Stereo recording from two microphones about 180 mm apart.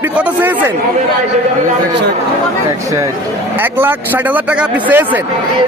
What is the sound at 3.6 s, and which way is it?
A man's voice, 10° right (ahead or behind).